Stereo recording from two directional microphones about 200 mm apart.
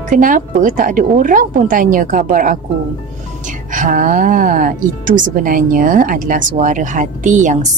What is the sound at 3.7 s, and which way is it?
Speech, 40° right (ahead or behind).